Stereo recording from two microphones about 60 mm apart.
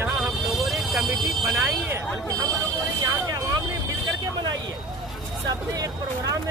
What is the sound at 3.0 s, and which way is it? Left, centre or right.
Vehicle, right.